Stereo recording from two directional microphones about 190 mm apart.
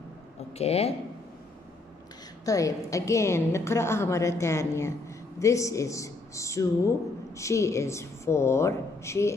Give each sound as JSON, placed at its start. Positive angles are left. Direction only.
{"t": 0.6, "sound": "speech", "side_deg": 35}
{"t": 2.4, "sound": "a woman's voice", "side_deg": 15}